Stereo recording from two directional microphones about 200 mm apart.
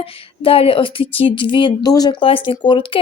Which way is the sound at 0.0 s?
30° left (ahead or behind).